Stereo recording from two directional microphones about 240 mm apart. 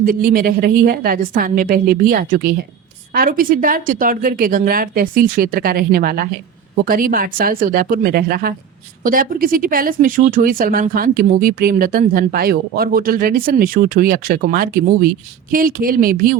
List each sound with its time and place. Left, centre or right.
0.0 s speech: right